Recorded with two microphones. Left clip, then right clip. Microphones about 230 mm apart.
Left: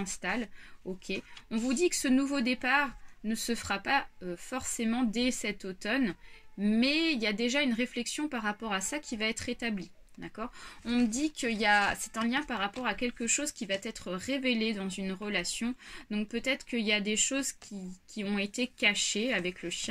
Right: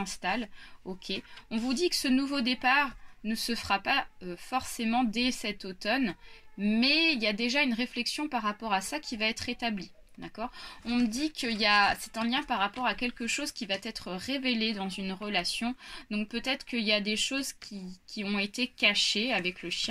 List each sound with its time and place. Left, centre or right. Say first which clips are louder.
0.0 s speech: right 2 dB; left